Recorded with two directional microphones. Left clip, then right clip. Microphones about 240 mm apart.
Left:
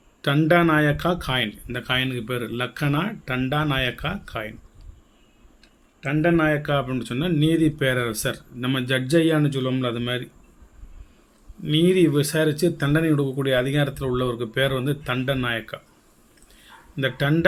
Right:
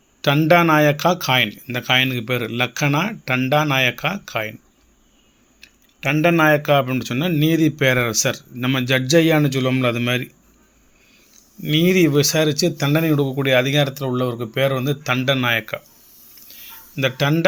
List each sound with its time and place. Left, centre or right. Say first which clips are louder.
0.2 s speech: right 4 dB; right
5.5 s speech: right 12 dB; right
11.6 s speech: right 2 dB; right
16.9 s speech: right 4 dB; right